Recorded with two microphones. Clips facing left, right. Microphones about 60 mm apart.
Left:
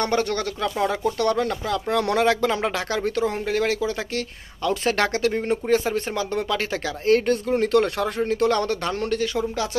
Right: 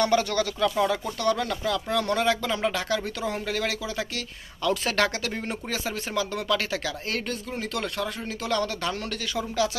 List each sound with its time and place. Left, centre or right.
0.0 s speech: left
1.9 s speech: left
4.6 s speech: left
8.8 s speech: left